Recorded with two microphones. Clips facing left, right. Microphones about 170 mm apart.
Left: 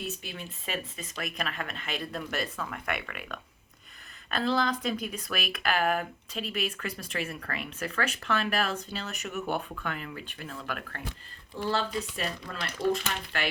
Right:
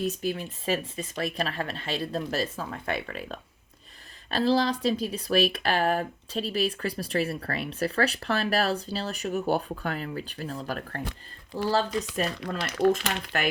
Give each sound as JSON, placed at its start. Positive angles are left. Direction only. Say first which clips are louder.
{"t": 0.0, "sound": "speech", "louder": "right 9 dB", "side_deg": -40}